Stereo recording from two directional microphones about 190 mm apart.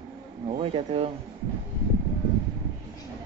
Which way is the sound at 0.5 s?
30° right (ahead or behind).